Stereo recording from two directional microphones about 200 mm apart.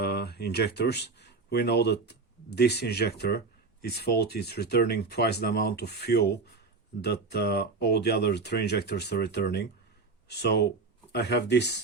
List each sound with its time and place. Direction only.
0.0 s speech: 55° left (ahead or behind)